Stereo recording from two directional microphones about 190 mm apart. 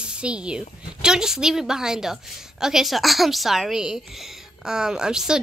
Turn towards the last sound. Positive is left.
turn(degrees=-5)  # may be behind; listen again after turning